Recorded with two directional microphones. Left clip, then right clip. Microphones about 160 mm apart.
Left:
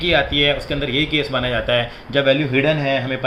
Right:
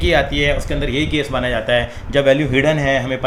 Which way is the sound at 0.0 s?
35° right (ahead or behind).